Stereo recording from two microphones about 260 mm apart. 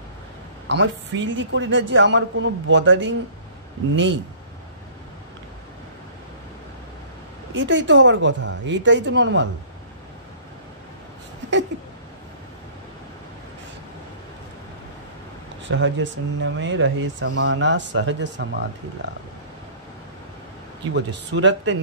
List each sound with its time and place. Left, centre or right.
0.7 s speech: right
7.5 s speech: right
15.7 s speech: right
20.9 s speech: right